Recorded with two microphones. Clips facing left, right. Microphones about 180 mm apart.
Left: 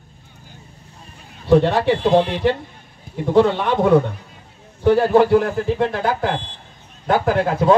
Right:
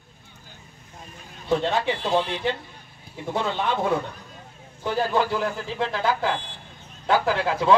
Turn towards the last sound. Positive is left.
turn(degrees=50)  # may be behind; listen again after turning